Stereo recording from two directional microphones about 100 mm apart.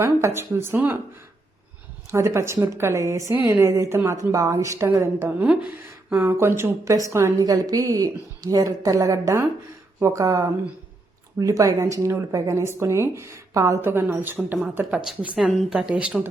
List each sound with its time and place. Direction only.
0.0 s a woman's voice: 25° right (ahead or behind)
2.0 s a woman's voice: 30° right (ahead or behind); by 16.3 s 15° right (ahead or behind)